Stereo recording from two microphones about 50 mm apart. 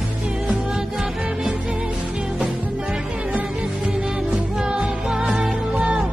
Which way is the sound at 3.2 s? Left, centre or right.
Right.